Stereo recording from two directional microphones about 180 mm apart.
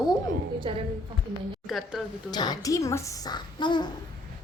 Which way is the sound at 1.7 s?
Centre (ahead or behind).